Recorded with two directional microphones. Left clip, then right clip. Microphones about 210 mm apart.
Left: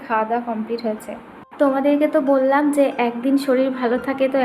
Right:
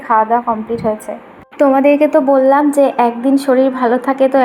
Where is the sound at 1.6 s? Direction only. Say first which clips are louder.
Right 7 dB; 25° right (ahead or behind).